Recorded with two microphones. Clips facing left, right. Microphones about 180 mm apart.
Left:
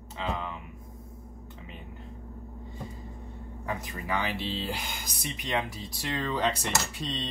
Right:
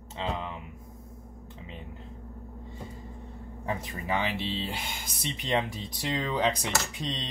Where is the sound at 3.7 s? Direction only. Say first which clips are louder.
Right 2 dB; 25° right (ahead or behind).